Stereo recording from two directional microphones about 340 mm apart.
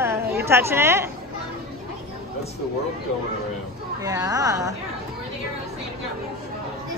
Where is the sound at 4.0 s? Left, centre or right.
Centre.